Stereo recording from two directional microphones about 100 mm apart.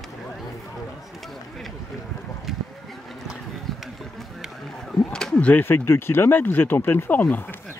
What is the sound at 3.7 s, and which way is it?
Run, centre (ahead or behind).